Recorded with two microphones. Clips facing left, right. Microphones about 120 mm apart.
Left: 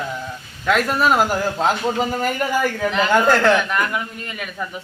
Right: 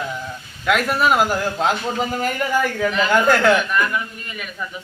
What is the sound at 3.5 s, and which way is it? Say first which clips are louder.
Speech: even; 25° left (ahead or behind).